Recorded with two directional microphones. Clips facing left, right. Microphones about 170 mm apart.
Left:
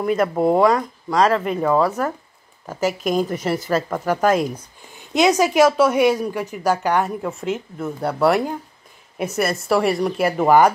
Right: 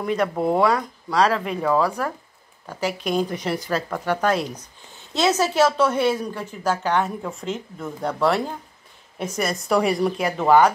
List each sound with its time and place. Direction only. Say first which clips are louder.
0.0 s speech: left 4 dB; 5° left (ahead or behind)
2.9 s a woman's voice: left 2 dB; 45° left (ahead or behind)
3.2 s a woman's voice: left 3 dB; 5° left (ahead or behind)